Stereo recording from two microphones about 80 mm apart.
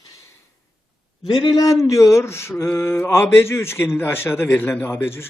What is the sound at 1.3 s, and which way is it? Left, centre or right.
Speech, left.